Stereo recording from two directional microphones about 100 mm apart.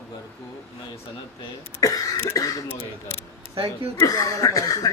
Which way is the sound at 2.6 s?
25° left (ahead or behind).